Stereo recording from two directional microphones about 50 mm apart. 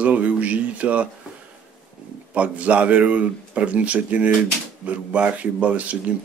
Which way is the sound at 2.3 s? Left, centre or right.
Right.